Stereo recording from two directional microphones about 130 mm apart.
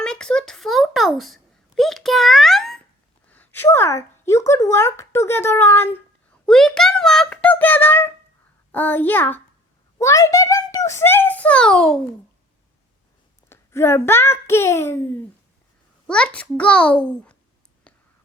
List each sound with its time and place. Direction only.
0.0 s a sound: 5° left (ahead or behind)
3.2 s speech: 15° left (ahead or behind)
6.4 s a child's voice: 5° left (ahead or behind)
13.5 s a child's voice: 20° left (ahead or behind)
16.0 s a child's voice: 5° left (ahead or behind)
17.9 s whispering: 10° left (ahead or behind)